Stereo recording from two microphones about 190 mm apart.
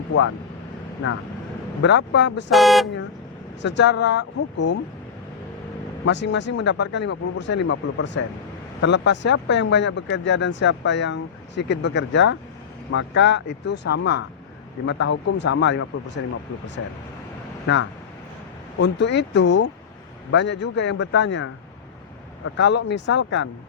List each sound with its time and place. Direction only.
1.8 s speech: 70° left (ahead or behind)
2.5 s speech: centre (ahead or behind)
3.6 s speech: 70° left (ahead or behind)
6.1 s speech: 65° left (ahead or behind)
16.8 s speech: 90° left
18.8 s speech: 70° left (ahead or behind)
22.5 s speech: 70° left (ahead or behind)